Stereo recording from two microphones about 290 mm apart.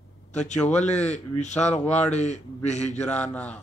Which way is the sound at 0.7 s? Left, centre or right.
Left.